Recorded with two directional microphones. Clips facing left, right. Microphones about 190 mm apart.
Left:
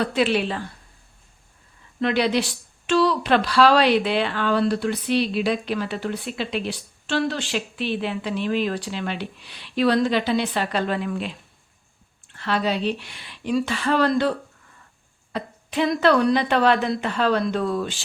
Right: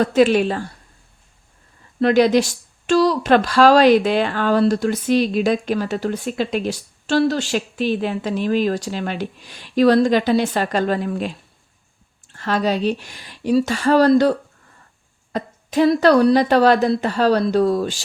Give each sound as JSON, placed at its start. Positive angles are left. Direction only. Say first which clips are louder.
{"t": 0.0, "sound": "speech", "louder": "right 7 dB", "side_deg": -45}
{"t": 2.0, "sound": "speech", "louder": "right 7 dB", "side_deg": -40}
{"t": 12.3, "sound": "a woman's voice", "louder": "right 4 dB", "side_deg": -45}